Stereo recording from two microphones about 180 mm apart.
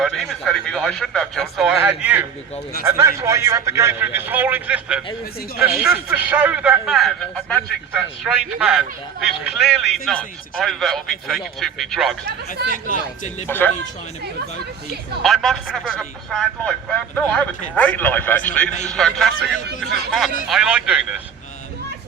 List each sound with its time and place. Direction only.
0.0 s a man's voice: centre (ahead or behind)
12.7 s speech: 50° left (ahead or behind)
15.2 s a man's voice: centre (ahead or behind)